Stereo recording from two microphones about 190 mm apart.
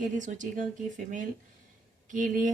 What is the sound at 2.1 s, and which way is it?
Speech, 45° right (ahead or behind).